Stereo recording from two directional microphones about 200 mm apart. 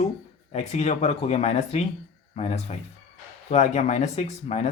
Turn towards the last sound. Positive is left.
turn(degrees=35)  # may be behind; listen again after turning